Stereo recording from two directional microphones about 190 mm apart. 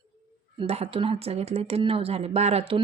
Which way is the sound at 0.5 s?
30° right (ahead or behind).